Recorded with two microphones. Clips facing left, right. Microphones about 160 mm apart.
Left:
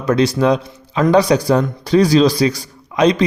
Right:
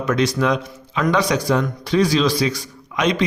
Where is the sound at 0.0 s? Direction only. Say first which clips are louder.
Left 4 dB; 30° left (ahead or behind).